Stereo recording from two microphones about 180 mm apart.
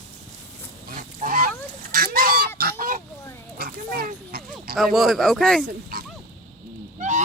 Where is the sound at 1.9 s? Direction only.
55° right (ahead or behind).